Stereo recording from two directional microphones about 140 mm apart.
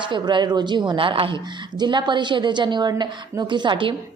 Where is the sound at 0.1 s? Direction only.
35° right (ahead or behind).